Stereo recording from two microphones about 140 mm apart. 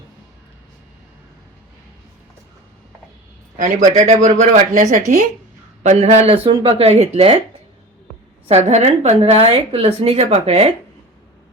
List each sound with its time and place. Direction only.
3.6 s speech: 65° right (ahead or behind); by 7.4 s 45° right (ahead or behind)
8.4 s speech: 50° right (ahead or behind)